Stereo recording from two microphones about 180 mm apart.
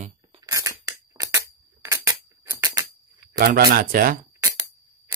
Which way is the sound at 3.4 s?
55° right (ahead or behind).